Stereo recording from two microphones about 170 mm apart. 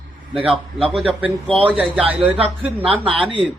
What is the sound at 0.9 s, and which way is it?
A man's voice, 5° right (ahead or behind).